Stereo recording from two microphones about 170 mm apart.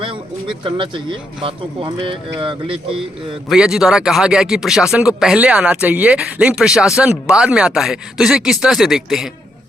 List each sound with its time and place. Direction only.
0.0 s speech: 30° right (ahead or behind)
3.5 s speech: 5° right (ahead or behind)